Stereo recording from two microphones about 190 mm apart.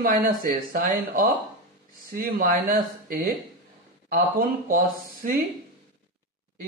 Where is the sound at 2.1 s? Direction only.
50° right (ahead or behind).